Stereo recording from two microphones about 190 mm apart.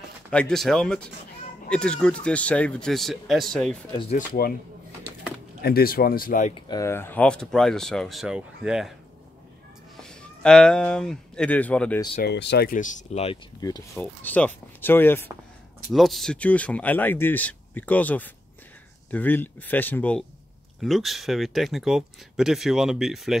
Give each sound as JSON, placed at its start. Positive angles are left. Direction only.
{"t": 0.3, "sound": "speech", "side_deg": 5}
{"t": 4.3, "sound": "speech", "side_deg": 50}
{"t": 5.6, "sound": "speech", "side_deg": 55}
{"t": 6.5, "sound": "speech", "side_deg": 20}
{"t": 10.0, "sound": "speech", "side_deg": 5}
{"t": 12.2, "sound": "speech", "side_deg": 60}
{"t": 13.6, "sound": "speech", "side_deg": 20}
{"t": 15.9, "sound": "speech", "side_deg": 0}